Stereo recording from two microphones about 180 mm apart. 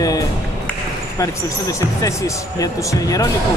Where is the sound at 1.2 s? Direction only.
15° left (ahead or behind).